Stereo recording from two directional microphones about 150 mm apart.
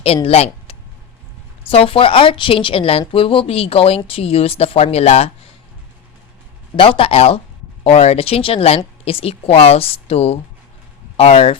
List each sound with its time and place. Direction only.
0.0 s speech: 40° left (ahead or behind)
6.7 s speech: 35° left (ahead or behind)